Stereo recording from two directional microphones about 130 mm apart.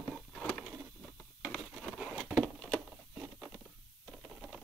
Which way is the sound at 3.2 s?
5° right (ahead or behind).